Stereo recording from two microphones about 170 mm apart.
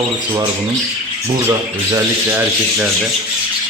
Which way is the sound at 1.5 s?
15° right (ahead or behind).